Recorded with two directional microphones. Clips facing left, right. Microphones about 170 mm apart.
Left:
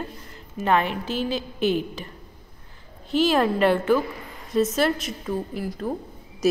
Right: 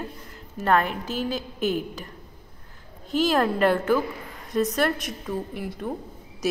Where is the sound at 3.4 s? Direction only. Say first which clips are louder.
Left 1 dB; 10° left (ahead or behind).